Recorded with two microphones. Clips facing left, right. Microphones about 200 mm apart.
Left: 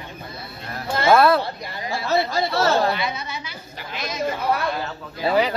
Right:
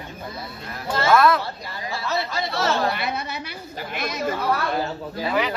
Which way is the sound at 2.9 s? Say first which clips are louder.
Left 1 dB; 55° right (ahead or behind).